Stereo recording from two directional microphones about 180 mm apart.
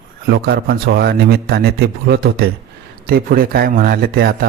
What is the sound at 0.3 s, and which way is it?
A man's voice, 65° right (ahead or behind).